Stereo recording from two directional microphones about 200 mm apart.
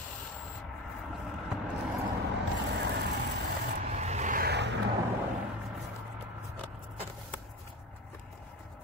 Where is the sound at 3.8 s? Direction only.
35° right (ahead or behind); by 4.8 s 60° right (ahead or behind).